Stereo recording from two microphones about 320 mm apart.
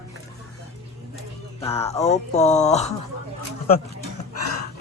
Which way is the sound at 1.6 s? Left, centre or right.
Centre.